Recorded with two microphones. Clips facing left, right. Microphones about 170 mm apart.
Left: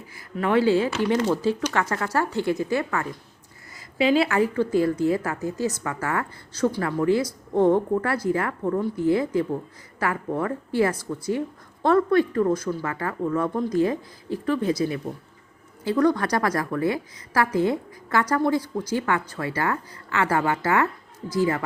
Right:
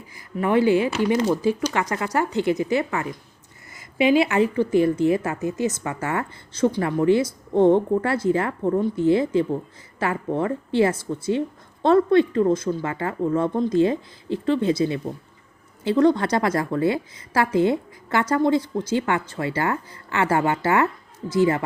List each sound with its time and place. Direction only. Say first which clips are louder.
0.3 s a woman's voice: right 1 dB; 15° right (ahead or behind)
4.3 s a woman's voice: right 2 dB; 20° right (ahead or behind)